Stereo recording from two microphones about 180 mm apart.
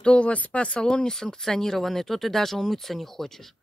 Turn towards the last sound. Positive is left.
turn(degrees=0)  # may be behind; listen again after turning